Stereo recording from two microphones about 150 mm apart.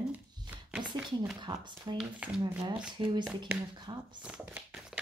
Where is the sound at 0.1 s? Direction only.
10° right (ahead or behind).